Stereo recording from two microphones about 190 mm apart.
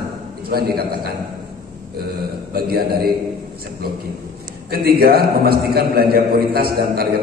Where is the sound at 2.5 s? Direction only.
55° right (ahead or behind).